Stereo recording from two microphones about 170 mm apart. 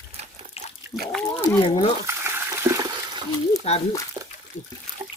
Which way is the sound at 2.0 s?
15° right (ahead or behind).